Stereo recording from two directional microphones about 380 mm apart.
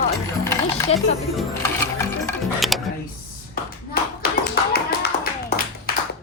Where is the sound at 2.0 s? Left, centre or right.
Centre.